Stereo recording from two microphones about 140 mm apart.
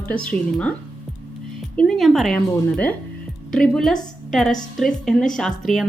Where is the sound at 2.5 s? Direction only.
10° left (ahead or behind).